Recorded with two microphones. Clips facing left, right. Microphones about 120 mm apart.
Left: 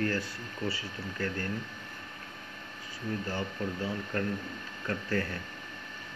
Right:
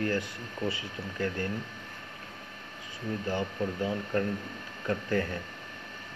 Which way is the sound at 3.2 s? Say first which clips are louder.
Right 3 dB; 20° right (ahead or behind).